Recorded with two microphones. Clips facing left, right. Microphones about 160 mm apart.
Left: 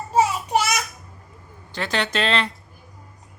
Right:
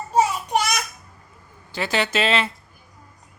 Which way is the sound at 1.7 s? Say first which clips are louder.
Right 2 dB; 5° right (ahead or behind).